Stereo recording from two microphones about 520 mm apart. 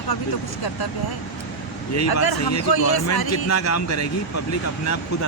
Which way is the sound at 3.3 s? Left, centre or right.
Left.